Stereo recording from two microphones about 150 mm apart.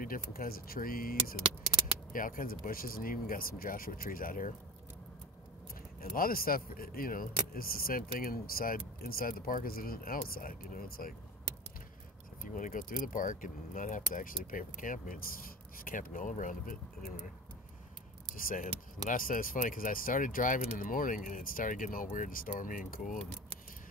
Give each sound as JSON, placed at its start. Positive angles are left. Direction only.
{"t": 0.0, "sound": "speech", "side_deg": 75}
{"t": 2.1, "sound": "speech", "side_deg": 70}
{"t": 5.9, "sound": "speech", "side_deg": 75}
{"t": 12.5, "sound": "speech", "side_deg": 60}
{"t": 18.3, "sound": "speech", "side_deg": 65}